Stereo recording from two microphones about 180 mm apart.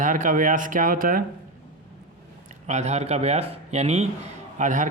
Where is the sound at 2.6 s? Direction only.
40° right (ahead or behind).